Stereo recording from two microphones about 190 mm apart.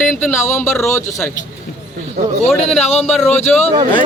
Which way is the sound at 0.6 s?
15° left (ahead or behind).